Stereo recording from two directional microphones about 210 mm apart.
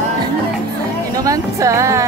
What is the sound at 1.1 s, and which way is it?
Music, 15° right (ahead or behind).